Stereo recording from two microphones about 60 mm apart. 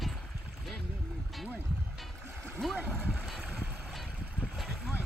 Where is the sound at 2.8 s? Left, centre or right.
Right.